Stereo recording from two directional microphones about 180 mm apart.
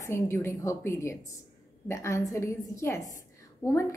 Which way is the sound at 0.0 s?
15° left (ahead or behind).